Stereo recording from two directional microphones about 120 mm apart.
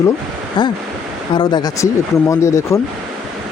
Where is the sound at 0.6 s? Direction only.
40° left (ahead or behind).